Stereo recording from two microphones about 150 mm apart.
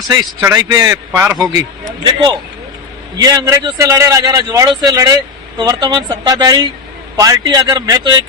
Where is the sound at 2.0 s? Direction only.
30° right (ahead or behind).